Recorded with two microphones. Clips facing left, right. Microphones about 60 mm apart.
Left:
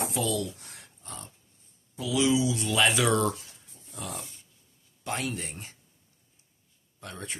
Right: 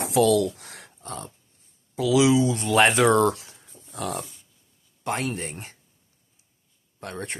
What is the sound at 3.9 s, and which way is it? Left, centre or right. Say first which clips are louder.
Dog: right 8 dB; right.